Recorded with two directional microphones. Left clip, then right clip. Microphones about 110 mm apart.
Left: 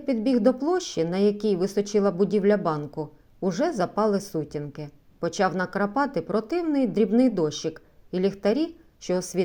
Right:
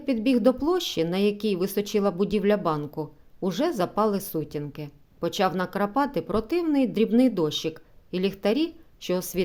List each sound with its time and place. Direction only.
0.0 s a woman's voice: 20° right (ahead or behind)